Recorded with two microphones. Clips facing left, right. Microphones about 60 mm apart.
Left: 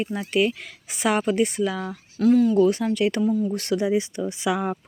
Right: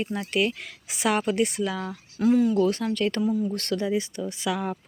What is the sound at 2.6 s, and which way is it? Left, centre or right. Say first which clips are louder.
Speech: left 4 dB; centre.